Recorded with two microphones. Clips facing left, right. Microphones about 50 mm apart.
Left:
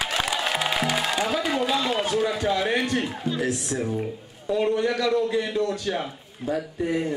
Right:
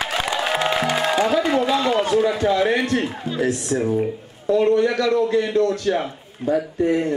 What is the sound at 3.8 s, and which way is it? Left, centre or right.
Speech, centre.